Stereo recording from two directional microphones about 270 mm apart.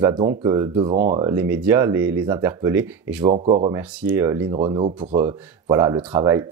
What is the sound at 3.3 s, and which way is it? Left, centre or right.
Speech, right.